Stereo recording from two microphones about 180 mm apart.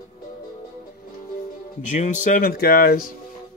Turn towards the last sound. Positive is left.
turn(degrees=55)  # may be behind; listen again after turning